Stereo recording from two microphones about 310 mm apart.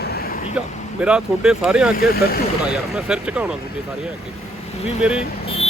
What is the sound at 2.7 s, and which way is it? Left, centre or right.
Speech, centre.